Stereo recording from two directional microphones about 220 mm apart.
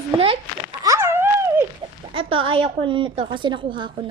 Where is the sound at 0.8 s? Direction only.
15° right (ahead or behind).